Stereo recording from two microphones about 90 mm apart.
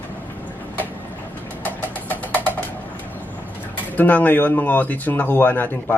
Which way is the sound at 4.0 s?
20° left (ahead or behind).